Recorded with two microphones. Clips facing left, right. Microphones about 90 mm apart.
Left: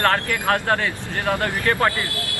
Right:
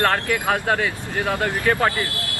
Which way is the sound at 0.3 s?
10° right (ahead or behind).